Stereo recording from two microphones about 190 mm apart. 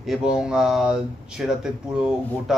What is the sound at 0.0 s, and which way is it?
Speech, 5° right (ahead or behind).